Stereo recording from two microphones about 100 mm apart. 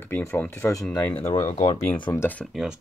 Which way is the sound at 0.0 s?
25° left (ahead or behind).